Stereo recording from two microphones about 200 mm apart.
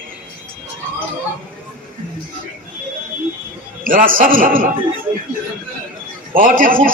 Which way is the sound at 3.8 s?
45° right (ahead or behind).